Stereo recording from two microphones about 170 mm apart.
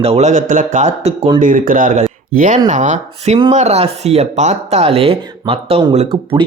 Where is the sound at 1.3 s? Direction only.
50° right (ahead or behind).